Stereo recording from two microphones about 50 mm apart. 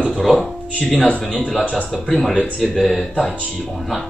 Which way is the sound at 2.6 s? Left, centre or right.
Centre.